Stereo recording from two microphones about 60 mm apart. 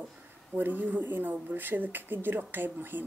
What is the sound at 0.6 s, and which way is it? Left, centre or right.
A woman's voice, right.